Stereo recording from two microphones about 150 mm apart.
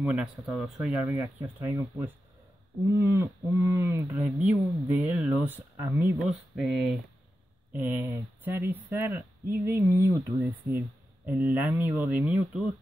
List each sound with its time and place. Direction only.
0.0 s speech: 5° right (ahead or behind)
1.0 s speech: 15° right (ahead or behind)
3.0 s speech: 20° right (ahead or behind); by 7.0 s centre (ahead or behind)
7.7 s speech: 10° right (ahead or behind)